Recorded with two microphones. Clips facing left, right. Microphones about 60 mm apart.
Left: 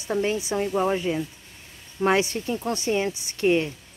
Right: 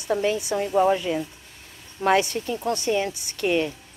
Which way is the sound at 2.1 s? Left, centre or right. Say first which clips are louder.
Right 3 dB; left.